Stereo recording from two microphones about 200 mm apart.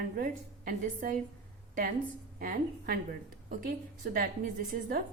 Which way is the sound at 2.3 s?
45° right (ahead or behind).